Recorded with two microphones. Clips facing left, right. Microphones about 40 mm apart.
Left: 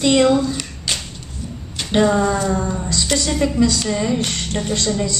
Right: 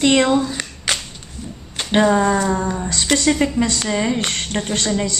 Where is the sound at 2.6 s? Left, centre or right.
Right.